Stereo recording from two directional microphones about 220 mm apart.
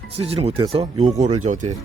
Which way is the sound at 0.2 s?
25° right (ahead or behind).